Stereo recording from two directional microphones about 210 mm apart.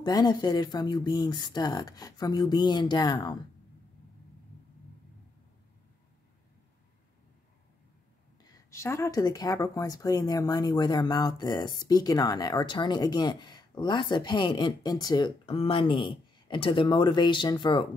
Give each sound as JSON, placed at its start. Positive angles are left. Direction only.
{"t": 0.0, "sound": "speech", "side_deg": 20}
{"t": 8.6, "sound": "speech", "side_deg": 15}